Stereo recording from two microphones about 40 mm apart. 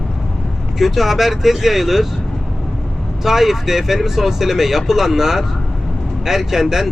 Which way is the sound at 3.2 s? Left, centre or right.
Centre.